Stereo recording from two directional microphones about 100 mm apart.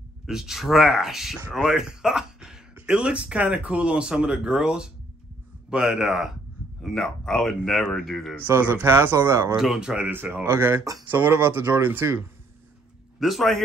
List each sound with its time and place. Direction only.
0.3 s speech: 5° right (ahead or behind)
8.5 s speech: 20° right (ahead or behind)
9.6 s speech: 5° right (ahead or behind)
10.1 s speech: 20° right (ahead or behind)
13.2 s speech: centre (ahead or behind)